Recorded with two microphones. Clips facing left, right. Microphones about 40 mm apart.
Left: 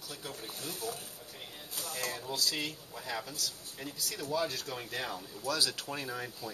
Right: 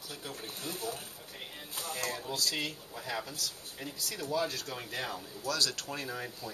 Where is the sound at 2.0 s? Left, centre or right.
Centre.